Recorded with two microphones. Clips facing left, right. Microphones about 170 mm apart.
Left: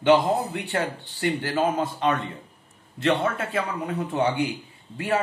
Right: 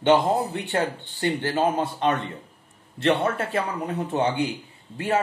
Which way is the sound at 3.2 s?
35° right (ahead or behind).